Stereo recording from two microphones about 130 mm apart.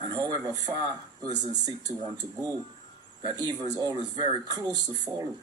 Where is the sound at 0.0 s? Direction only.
35° right (ahead or behind).